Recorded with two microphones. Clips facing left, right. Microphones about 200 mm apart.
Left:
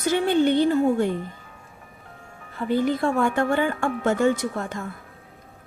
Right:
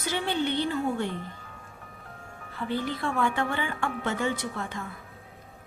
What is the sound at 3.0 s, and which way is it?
Speech, 45° left (ahead or behind).